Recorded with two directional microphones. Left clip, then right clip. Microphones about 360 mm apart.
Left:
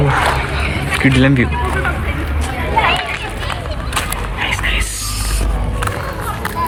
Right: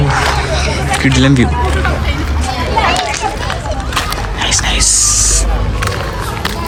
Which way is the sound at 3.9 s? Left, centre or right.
Centre.